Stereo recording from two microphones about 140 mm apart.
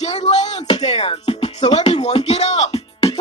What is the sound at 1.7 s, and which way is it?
Speech, 50° left (ahead or behind).